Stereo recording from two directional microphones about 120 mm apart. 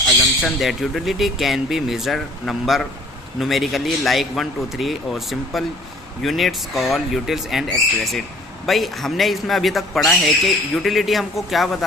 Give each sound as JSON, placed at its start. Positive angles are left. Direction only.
{"t": 0.4, "sound": "speech", "side_deg": 0}